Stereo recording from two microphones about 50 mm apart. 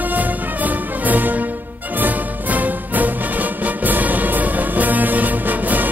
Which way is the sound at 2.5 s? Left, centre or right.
Right.